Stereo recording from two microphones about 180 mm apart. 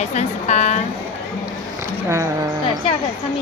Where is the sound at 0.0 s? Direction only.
40° left (ahead or behind).